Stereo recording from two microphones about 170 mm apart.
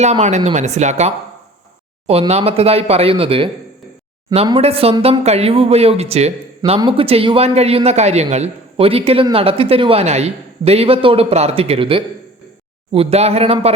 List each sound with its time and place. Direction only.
0.0 s a man's voice: 40° right (ahead or behind)